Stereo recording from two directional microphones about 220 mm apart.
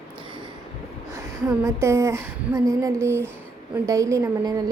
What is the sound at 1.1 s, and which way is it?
A woman's voice, 10° right (ahead or behind).